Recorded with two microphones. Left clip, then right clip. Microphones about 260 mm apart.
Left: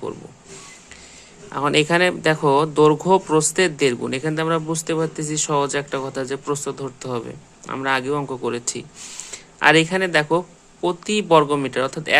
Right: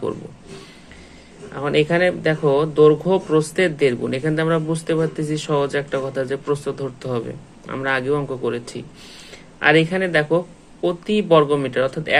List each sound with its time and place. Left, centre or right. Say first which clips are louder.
1.5 s speech: left 1 dB; left